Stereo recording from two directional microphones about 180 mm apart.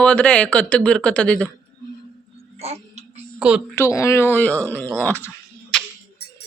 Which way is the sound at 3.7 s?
15° left (ahead or behind).